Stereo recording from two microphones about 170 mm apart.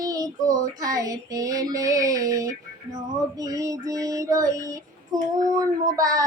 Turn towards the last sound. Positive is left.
turn(degrees=-20)  # may be behind; listen again after turning